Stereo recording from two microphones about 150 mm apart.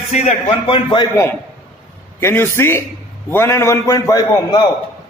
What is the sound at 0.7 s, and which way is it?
Speech, 30° left (ahead or behind).